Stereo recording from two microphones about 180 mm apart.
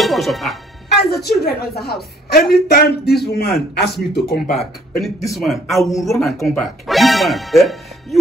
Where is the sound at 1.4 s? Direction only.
60° left (ahead or behind).